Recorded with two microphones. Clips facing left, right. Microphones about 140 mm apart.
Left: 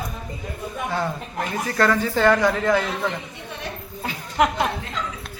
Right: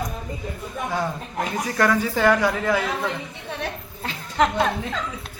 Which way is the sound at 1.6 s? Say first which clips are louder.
Left 1 dB; 10° right (ahead or behind).